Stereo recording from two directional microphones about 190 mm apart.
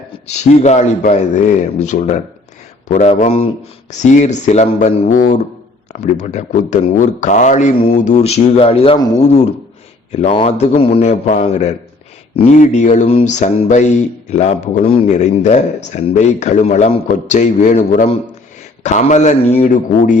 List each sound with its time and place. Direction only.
0.3 s speech: 35° left (ahead or behind)
9.2 s speech: 35° left (ahead or behind)